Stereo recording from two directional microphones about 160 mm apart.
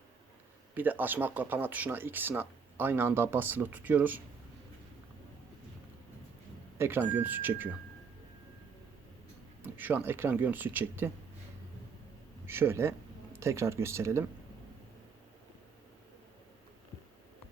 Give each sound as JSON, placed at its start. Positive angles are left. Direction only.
{"t": 0.7, "sound": "speech", "side_deg": -10}
{"t": 6.7, "sound": "speech", "side_deg": -15}
{"t": 9.6, "sound": "speech", "side_deg": -10}
{"t": 12.5, "sound": "speech", "side_deg": -15}